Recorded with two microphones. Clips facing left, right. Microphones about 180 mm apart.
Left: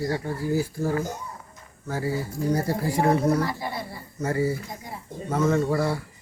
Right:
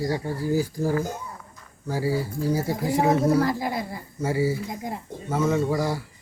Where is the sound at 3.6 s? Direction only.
90° right.